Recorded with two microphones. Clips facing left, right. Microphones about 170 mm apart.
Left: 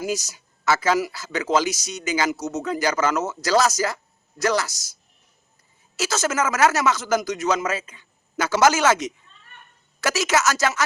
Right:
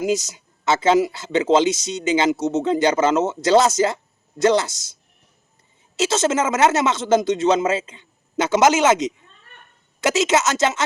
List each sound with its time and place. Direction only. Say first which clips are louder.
0.0 s speech: right 6 dB; 20° right (ahead or behind)
6.0 s speech: right 4 dB; 25° right (ahead or behind)